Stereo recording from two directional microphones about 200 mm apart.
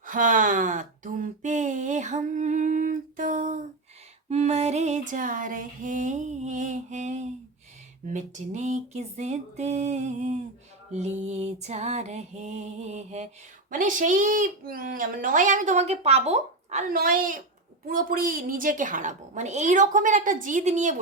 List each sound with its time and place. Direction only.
0.0 s a sound: 40° right (ahead or behind)
4.3 s music: 30° right (ahead or behind)
8.0 s speech: 35° right (ahead or behind)